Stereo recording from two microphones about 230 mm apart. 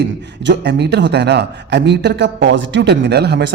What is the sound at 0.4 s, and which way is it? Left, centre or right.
A man's voice, right.